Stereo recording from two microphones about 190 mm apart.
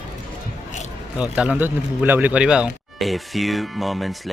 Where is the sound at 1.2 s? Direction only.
5° right (ahead or behind).